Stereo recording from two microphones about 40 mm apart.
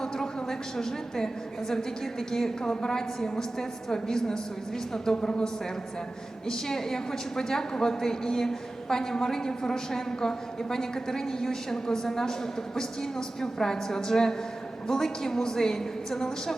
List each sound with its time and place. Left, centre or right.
0.0 s a woman's voice: centre
6.5 s a woman's voice: centre